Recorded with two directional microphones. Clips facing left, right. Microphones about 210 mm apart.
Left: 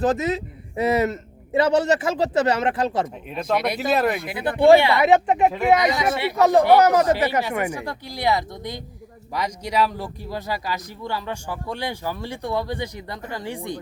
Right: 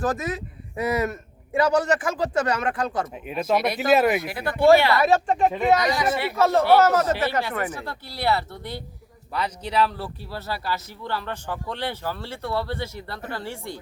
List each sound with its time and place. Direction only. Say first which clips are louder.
0.0 s a man's voice: left 5 dB; 20° left (ahead or behind)
3.2 s speech: right 3 dB; 5° right (ahead or behind)
4.3 s a man's voice: left 5 dB; 20° left (ahead or behind)
5.5 s speech: left 1 dB; centre (ahead or behind)
5.7 s speech: left 2 dB; 15° left (ahead or behind)